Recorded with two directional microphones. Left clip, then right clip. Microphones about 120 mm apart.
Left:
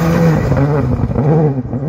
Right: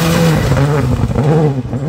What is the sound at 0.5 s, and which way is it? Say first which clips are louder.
Vehicle: even; 45° right (ahead or behind).